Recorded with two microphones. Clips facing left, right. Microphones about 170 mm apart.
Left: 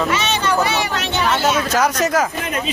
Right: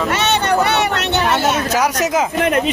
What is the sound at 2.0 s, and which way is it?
Speech, 15° right (ahead or behind).